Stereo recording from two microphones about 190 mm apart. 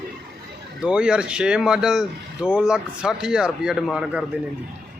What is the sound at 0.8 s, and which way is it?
Speech, 5° right (ahead or behind).